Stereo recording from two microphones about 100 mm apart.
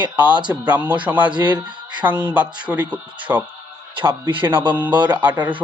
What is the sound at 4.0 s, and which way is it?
Speech, 55° right (ahead or behind).